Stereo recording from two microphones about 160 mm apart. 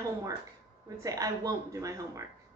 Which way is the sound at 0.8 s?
20° right (ahead or behind).